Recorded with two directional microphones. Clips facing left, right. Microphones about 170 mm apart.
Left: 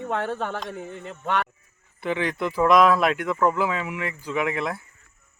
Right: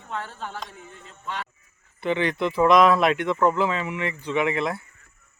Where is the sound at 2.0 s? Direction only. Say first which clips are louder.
Right 2 dB; 5° left (ahead or behind).